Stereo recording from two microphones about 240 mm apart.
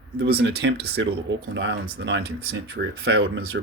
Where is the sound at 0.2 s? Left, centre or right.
Right.